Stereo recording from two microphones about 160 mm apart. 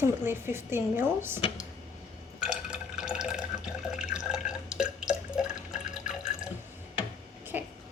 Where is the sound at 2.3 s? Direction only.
5° right (ahead or behind).